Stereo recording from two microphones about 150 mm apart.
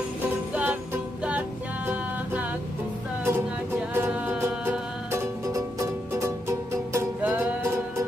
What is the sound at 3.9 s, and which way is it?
Music, 15° right (ahead or behind).